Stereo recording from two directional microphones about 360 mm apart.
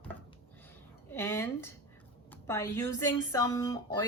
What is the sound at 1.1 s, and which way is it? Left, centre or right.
Speech, centre.